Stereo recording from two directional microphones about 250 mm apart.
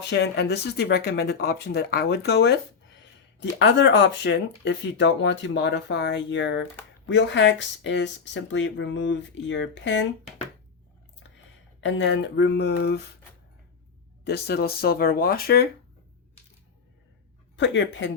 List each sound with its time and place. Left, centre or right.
0.1 s speech: left
3.6 s speech: left
11.8 s speech: left
14.3 s speech: left
17.6 s speech: left